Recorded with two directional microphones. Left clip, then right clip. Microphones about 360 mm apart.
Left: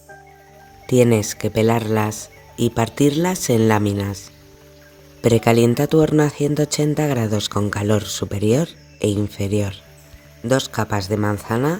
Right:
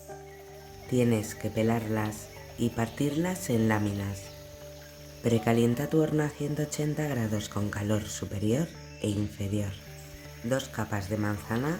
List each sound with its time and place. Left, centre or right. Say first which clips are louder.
0.9 s speech: left 12 dB; left
5.2 s speech: left 11 dB; left